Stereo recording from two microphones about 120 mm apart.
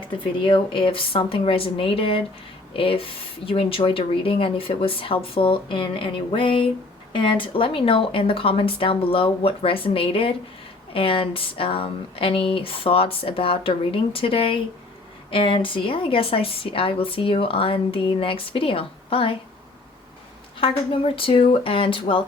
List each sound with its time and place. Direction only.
0.2 s a woman's voice: 45° left (ahead or behind)
20.6 s a woman's voice: 45° left (ahead or behind)